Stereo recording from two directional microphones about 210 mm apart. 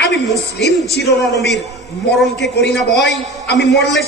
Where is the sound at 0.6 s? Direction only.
55° left (ahead or behind).